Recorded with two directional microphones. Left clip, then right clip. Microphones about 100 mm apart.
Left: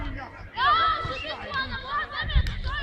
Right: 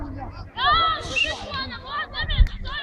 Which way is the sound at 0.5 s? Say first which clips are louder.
Right 2 dB; 50° left (ahead or behind).